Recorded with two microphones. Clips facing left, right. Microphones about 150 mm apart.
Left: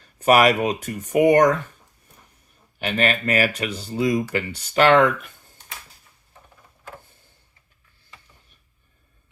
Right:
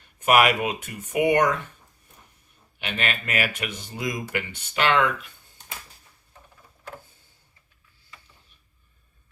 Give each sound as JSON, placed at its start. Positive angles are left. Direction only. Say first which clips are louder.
{"t": 0.0, "sound": "speech", "louder": "left 3 dB", "side_deg": 35}
{"t": 2.7, "sound": "speech", "louder": "left 7 dB", "side_deg": 40}